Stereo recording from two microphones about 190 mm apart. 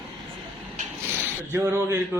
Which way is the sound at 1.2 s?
10° right (ahead or behind).